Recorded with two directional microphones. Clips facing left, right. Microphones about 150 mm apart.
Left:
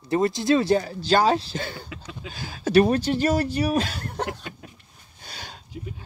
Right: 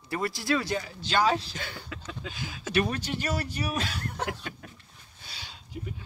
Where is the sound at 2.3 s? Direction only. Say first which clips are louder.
Left 9 dB; 40° left (ahead or behind).